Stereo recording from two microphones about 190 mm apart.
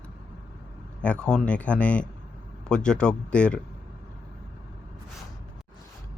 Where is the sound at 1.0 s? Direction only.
5° left (ahead or behind).